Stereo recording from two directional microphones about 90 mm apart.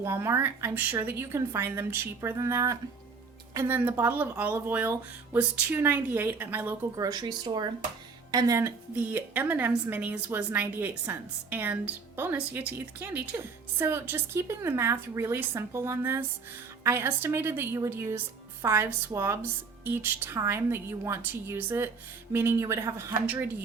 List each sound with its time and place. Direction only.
0.0 s a woman's voice: 30° right (ahead or behind)
0.7 s a woman's voice: 15° right (ahead or behind); by 2.7 s 35° right (ahead or behind)
3.7 s a woman's voice: 20° right (ahead or behind)
6.9 s speech: 45° right (ahead or behind)
8.3 s speech: 40° right (ahead or behind)
9.1 s a woman's voice: 20° right (ahead or behind)
23.2 s a woman's voice: 20° right (ahead or behind)